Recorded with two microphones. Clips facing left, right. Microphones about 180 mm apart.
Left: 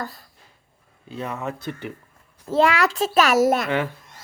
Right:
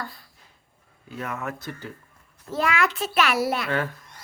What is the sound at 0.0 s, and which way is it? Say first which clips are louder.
Speech: left 4 dB; 40° left (ahead or behind).